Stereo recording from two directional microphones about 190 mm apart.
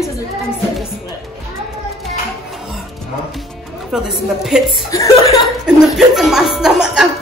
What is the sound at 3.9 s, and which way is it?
Speech, 5° right (ahead or behind).